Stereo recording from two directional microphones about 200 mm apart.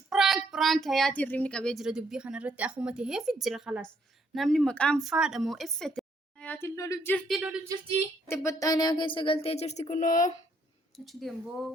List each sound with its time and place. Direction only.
0.1 s a woman's voice: centre (ahead or behind)
8.3 s speech: 15° left (ahead or behind); by 10.3 s 40° left (ahead or behind)
10.9 s a woman's voice: centre (ahead or behind)